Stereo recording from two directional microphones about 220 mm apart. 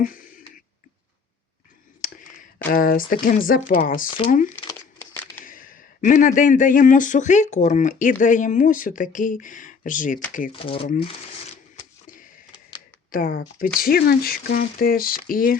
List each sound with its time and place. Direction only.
0.0 s a sound: 40° left (ahead or behind)
2.0 s whispering: 35° left (ahead or behind)
2.6 s speech: 40° left (ahead or behind)
4.9 s a sound: 10° left (ahead or behind)
5.5 s speech: 40° left (ahead or behind)
10.5 s speech: 25° left (ahead or behind)
13.1 s speech: 40° left (ahead or behind)